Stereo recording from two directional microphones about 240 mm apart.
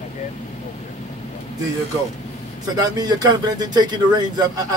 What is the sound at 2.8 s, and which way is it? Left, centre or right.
A man's voice, centre.